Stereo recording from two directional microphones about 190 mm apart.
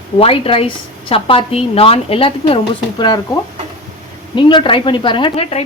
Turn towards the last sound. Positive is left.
turn(degrees=30)  # may be behind; listen again after turning